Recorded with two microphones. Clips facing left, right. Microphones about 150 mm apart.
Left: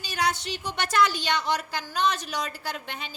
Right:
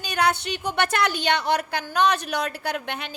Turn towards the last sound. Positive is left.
turn(degrees=-65)  # may be behind; listen again after turning